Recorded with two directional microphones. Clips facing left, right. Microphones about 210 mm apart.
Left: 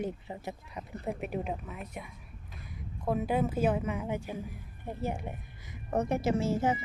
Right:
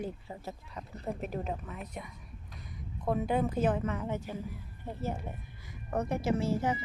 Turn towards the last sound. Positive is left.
turn(degrees=25)  # may be behind; listen again after turning